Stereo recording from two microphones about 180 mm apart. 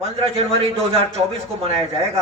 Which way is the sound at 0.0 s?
35° right (ahead or behind).